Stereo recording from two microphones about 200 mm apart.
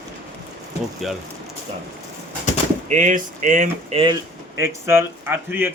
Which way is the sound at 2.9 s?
40° right (ahead or behind).